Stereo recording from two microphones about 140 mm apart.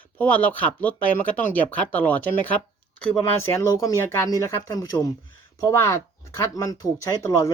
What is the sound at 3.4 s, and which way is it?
Speech, 20° left (ahead or behind).